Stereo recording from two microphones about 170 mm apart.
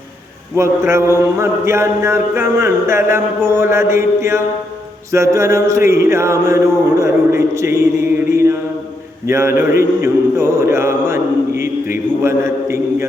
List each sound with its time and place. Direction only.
0.5 s a man's voice: 15° right (ahead or behind)
8.3 s mantra: 15° right (ahead or behind)
9.2 s a man's voice: 15° right (ahead or behind)